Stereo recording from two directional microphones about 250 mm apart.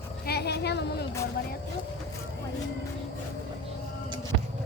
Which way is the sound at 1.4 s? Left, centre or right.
Left.